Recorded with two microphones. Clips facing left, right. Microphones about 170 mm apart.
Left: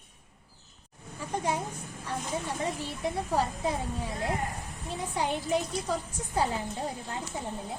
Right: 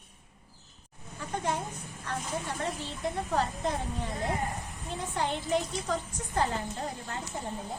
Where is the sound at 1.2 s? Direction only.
10° left (ahead or behind).